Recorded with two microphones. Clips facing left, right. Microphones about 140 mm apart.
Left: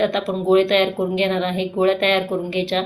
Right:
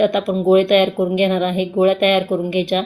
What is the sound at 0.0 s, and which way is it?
Speech, 15° right (ahead or behind).